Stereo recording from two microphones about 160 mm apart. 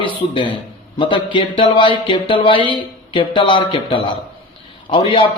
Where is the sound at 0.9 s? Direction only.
30° left (ahead or behind).